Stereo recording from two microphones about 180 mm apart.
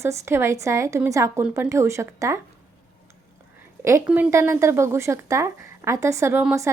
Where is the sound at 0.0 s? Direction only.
15° right (ahead or behind).